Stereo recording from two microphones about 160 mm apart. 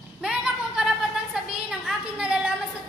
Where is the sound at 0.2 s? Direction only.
5° right (ahead or behind).